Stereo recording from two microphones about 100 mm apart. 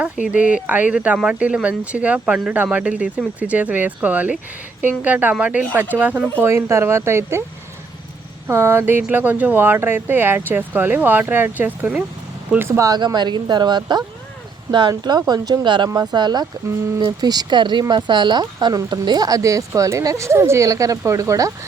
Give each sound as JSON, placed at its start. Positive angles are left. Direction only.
{"t": 0.0, "sound": "speech", "side_deg": -10}
{"t": 6.4, "sound": "speech", "side_deg": -25}
{"t": 8.4, "sound": "speech", "side_deg": -25}
{"t": 12.5, "sound": "speech", "side_deg": -25}
{"t": 12.9, "sound": "speech", "side_deg": -45}